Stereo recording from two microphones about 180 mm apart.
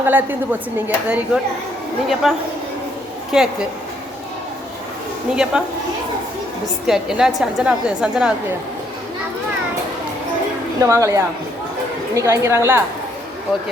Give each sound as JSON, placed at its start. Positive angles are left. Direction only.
{"t": 0.0, "sound": "a woman's voice", "side_deg": -10}
{"t": 5.3, "sound": "a woman's voice", "side_deg": -5}
{"t": 6.8, "sound": "a woman's voice", "side_deg": -5}
{"t": 10.8, "sound": "a woman's voice", "side_deg": -15}